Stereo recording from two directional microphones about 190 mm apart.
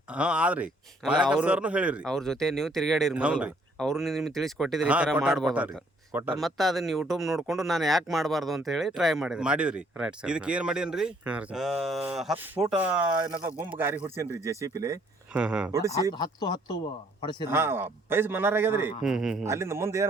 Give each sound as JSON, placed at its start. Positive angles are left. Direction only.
{"t": 0.1, "sound": "speech", "side_deg": -5}
{"t": 6.1, "sound": "speech", "side_deg": -10}
{"t": 6.4, "sound": "a man's voice", "side_deg": 0}
{"t": 15.3, "sound": "speech", "side_deg": -5}
{"t": 15.8, "sound": "speech", "side_deg": 15}
{"t": 17.5, "sound": "a man's voice", "side_deg": -10}
{"t": 19.5, "sound": "a man's voice", "side_deg": -15}